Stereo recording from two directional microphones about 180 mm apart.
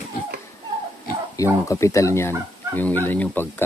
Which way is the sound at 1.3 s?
15° left (ahead or behind).